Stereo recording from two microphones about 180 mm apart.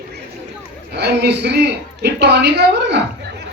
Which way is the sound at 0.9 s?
65° right (ahead or behind).